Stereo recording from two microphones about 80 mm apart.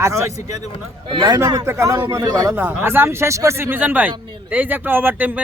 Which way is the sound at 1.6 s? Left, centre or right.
Right.